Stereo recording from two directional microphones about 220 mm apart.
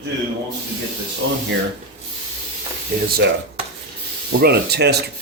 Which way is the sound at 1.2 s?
55° right (ahead or behind).